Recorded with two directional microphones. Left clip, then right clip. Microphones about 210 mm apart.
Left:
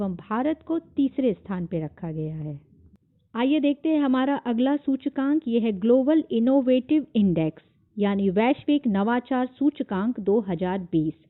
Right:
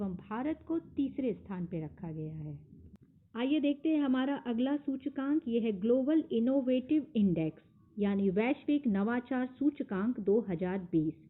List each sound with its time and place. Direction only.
0.0 s a woman's voice: 45° left (ahead or behind)